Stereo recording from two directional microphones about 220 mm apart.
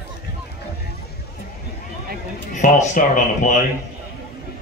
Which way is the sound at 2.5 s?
35° left (ahead or behind).